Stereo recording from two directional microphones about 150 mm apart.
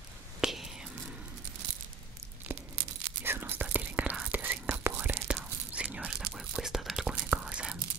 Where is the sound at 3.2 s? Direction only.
15° right (ahead or behind).